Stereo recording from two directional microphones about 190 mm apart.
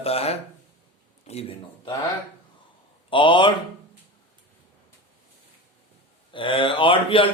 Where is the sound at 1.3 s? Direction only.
30° left (ahead or behind).